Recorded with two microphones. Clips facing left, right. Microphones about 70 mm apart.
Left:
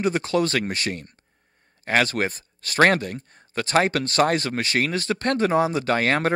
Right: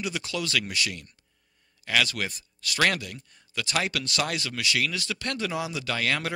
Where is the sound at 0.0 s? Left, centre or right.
Left.